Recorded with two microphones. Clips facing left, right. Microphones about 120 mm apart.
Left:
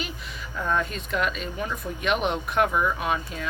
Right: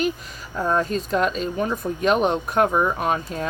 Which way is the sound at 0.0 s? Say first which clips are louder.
Right 10 dB; 40° right (ahead or behind).